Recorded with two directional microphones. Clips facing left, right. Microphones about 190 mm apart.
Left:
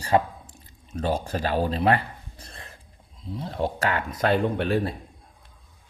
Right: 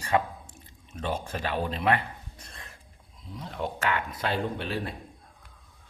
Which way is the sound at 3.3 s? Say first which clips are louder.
Left 5 dB; 35° left (ahead or behind).